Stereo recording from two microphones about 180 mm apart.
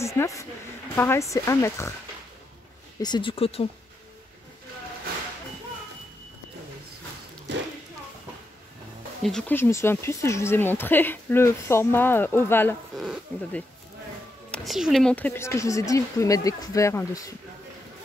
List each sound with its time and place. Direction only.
0.0 s a woman's voice: 15° left (ahead or behind)
3.0 s speech: 25° left (ahead or behind)
7.5 s a sound: 80° right
9.2 s speech: 5° left (ahead or behind)
9.6 s a woman's voice: 15° left (ahead or behind)
12.9 s a woman's voice: centre (ahead or behind); by 17.3 s 15° left (ahead or behind)